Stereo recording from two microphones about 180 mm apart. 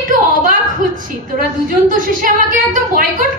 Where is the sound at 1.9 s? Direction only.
50° right (ahead or behind).